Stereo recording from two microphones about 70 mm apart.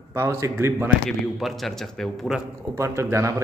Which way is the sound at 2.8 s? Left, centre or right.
Right.